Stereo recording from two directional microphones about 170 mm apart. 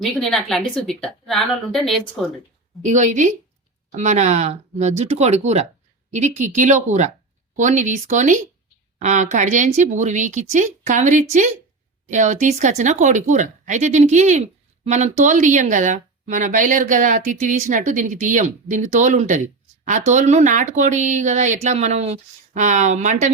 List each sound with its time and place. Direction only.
0.0 s a woman's voice: 5° left (ahead or behind)
2.8 s speech: 45° right (ahead or behind)